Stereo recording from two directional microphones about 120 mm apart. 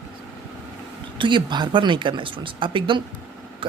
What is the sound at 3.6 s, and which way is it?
Vehicle, 45° right (ahead or behind).